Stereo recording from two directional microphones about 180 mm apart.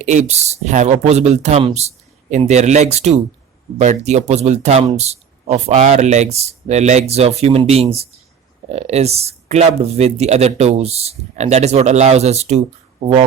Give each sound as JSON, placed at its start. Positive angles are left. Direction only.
{"t": 0.0, "sound": "speech", "side_deg": -40}